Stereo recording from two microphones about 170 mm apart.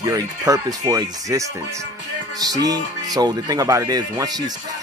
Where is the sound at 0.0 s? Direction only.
20° right (ahead or behind).